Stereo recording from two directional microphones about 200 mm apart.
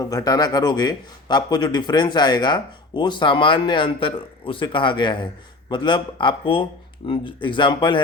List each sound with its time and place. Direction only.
0.0 s a man's voice: 20° left (ahead or behind)